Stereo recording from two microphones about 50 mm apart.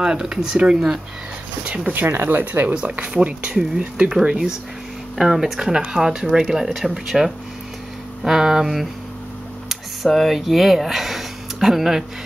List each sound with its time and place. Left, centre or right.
0.0 s speech: centre
2.0 s speech: right
2.7 s speech: right